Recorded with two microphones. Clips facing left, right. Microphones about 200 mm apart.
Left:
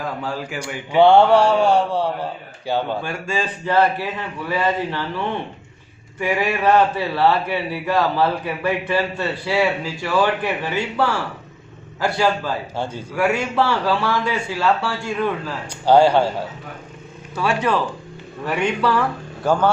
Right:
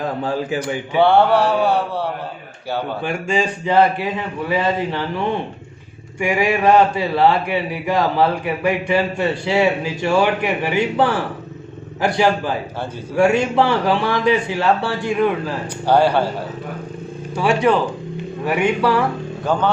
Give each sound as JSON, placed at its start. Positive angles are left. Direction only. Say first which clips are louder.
{"t": 0.0, "sound": "speech", "louder": "right 4 dB", "side_deg": -20}
{"t": 0.6, "sound": "a man's voice", "louder": "left 4 dB", "side_deg": 15}
{"t": 3.0, "sound": "a man's voice", "louder": "right 4 dB", "side_deg": -15}
{"t": 6.1, "sound": "a man's voice", "louder": "right 3 dB", "side_deg": -15}
{"t": 15.9, "sound": "a man's voice", "louder": "left 2 dB", "side_deg": 15}
{"t": 17.3, "sound": "a man's voice", "louder": "right 4 dB", "side_deg": -15}